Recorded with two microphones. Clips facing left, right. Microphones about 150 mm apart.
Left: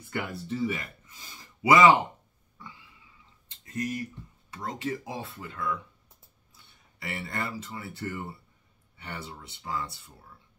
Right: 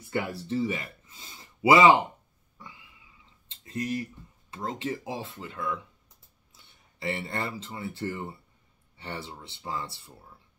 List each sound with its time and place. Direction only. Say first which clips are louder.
0.1 s speech: right 3 dB; 25° right (ahead or behind)
3.4 s a sound: right 1 dB; 25° right (ahead or behind)
4.5 s speech: right 1 dB; 25° right (ahead or behind)